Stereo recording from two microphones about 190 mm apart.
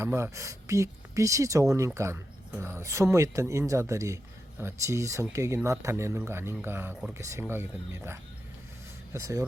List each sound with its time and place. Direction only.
0.0 s speech: 15° right (ahead or behind)